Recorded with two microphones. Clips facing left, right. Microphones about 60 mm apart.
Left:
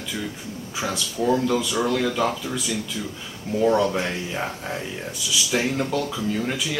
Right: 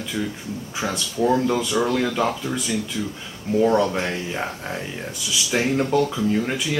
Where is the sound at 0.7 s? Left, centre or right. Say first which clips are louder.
Right 2 dB; right.